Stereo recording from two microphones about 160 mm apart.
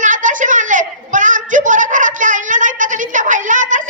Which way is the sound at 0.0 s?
55° right (ahead or behind).